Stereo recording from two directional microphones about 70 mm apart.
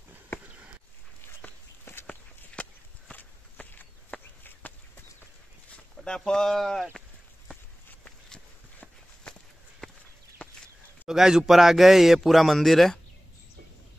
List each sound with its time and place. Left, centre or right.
2.0 s walk: centre
5.9 s speech: centre
9.8 s clip-clop: centre
11.1 s speech: centre